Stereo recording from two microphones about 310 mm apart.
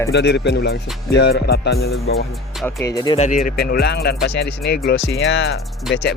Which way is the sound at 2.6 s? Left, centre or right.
Centre.